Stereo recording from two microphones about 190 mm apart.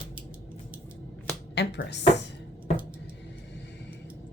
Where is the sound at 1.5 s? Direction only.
65° left (ahead or behind).